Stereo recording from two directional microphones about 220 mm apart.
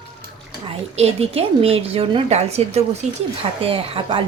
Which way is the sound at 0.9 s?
30° right (ahead or behind).